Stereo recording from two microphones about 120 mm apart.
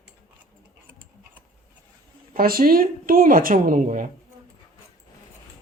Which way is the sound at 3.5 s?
90° right.